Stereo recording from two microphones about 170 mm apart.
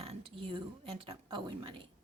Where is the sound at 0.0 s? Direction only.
35° right (ahead or behind).